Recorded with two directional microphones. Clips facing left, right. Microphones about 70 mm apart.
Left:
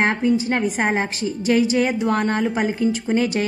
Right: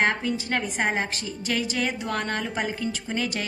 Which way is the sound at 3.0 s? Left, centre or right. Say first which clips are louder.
Left 7 dB; left.